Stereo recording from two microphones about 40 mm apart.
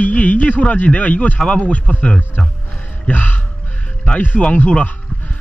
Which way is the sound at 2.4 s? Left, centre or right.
Centre.